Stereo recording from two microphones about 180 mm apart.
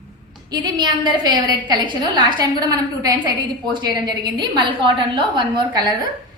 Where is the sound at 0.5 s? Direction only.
25° right (ahead or behind).